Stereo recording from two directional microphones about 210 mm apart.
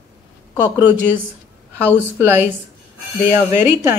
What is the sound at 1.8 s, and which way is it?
Speech, 10° right (ahead or behind).